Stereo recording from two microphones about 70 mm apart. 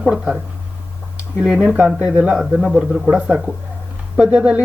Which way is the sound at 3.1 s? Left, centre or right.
Centre.